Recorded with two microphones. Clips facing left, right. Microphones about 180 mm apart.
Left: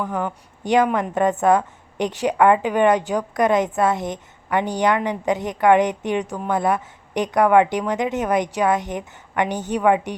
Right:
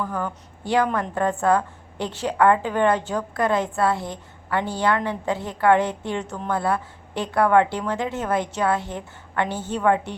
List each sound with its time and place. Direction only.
0.0 s a woman's voice: 20° left (ahead or behind)